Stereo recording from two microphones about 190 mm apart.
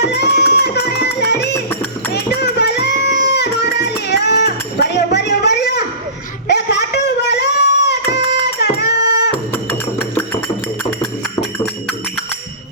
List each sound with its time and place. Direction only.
0.0 s music: 60° left (ahead or behind)
2.1 s a sound: 60° left (ahead or behind)
11.3 s music: 5° left (ahead or behind)